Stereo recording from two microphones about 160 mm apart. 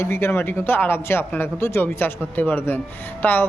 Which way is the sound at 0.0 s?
15° left (ahead or behind).